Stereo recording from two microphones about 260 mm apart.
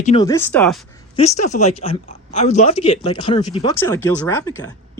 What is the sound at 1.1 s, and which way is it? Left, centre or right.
Speech, left.